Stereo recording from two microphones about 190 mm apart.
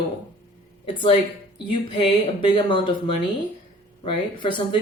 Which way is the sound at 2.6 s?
25° left (ahead or behind).